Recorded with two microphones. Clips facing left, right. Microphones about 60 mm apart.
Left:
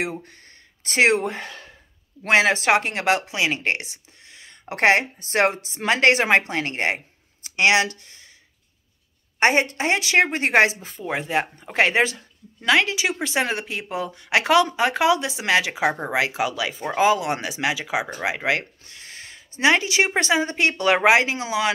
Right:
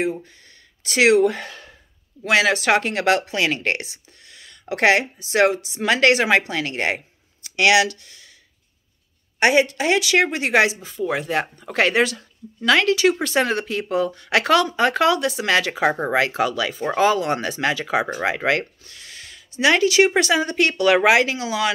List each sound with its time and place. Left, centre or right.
0.8 s speech: left
9.4 s speech: left
11.1 s speech: centre